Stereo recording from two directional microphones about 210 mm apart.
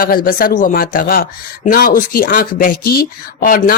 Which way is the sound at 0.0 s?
45° left (ahead or behind).